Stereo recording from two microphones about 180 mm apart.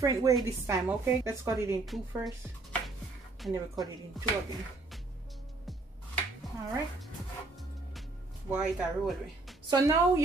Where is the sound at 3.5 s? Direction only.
20° right (ahead or behind).